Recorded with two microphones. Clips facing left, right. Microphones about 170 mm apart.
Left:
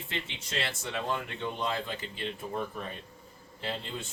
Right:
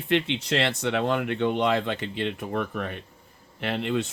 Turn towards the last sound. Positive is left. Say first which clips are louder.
# right 10 dB
turn(degrees=-75)  # may be behind; listen again after turning